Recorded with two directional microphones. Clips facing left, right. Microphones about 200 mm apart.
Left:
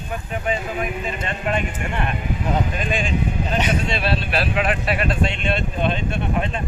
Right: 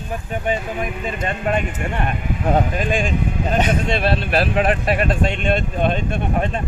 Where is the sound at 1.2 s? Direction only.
40° right (ahead or behind).